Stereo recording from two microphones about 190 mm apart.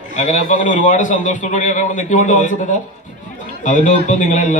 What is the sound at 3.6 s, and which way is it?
Speech, 40° left (ahead or behind).